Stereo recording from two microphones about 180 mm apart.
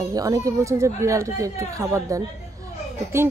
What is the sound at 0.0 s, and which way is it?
A woman's voice, 20° right (ahead or behind).